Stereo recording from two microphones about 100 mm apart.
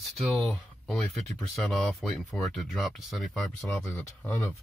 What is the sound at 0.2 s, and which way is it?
Speech, centre (ahead or behind).